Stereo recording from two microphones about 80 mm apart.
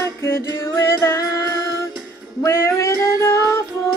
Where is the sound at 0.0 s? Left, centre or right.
Left.